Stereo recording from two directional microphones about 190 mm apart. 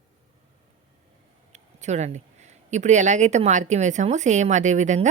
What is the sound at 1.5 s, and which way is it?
Speech, 35° right (ahead or behind).